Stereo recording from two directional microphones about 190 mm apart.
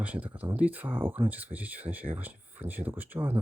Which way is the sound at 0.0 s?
10° right (ahead or behind).